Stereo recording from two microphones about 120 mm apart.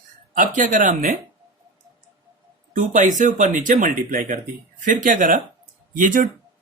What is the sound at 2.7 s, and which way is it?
Speech, 90° right.